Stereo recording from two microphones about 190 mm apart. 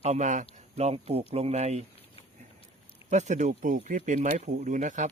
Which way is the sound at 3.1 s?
40° right (ahead or behind).